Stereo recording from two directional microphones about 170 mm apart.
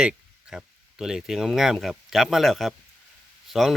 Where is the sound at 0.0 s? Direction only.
5° right (ahead or behind).